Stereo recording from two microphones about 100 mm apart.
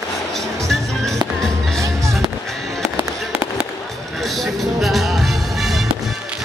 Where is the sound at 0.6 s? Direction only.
5° left (ahead or behind).